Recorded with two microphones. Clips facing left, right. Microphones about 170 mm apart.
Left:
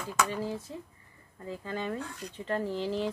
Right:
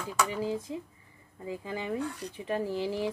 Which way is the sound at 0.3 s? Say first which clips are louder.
Right 2 dB; 15° right (ahead or behind).